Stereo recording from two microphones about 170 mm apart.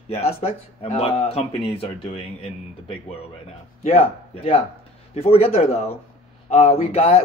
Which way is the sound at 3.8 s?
35° left (ahead or behind).